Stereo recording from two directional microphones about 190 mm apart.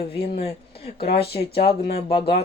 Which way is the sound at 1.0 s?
55° left (ahead or behind).